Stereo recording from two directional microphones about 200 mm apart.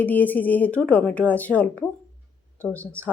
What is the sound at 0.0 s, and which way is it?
Speech, 10° left (ahead or behind).